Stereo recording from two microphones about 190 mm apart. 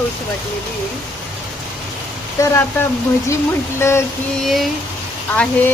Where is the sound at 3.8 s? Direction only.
15° left (ahead or behind).